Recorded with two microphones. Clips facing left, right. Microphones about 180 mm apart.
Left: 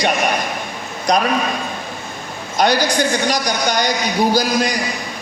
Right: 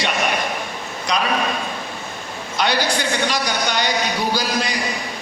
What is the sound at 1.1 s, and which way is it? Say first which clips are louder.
Speech: left 6 dB; 40° left (ahead or behind).